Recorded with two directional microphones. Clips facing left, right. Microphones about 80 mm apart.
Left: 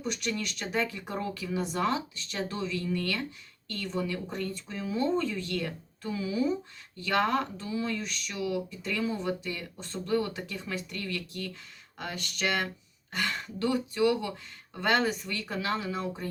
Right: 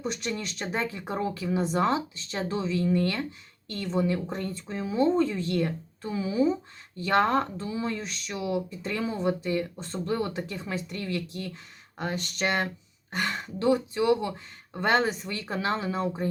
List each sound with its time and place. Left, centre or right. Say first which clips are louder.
0.0 s speech: right 1 dB; right